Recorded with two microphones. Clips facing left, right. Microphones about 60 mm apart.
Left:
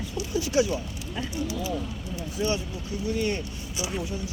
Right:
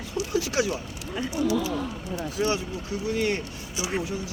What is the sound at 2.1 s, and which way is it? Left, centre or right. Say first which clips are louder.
Speech: right 2 dB; right.